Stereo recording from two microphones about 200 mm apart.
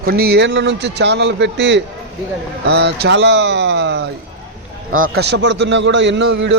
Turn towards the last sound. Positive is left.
turn(degrees=-60)  # may be behind; listen again after turning